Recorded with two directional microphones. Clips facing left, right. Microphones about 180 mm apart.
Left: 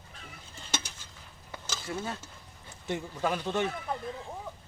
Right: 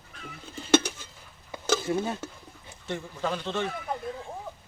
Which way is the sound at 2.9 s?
10° left (ahead or behind).